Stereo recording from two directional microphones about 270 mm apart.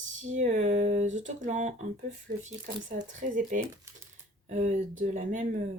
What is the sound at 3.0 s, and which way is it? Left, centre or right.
Speech, right.